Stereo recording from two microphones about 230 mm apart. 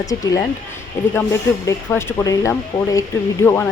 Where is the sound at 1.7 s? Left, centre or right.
Centre.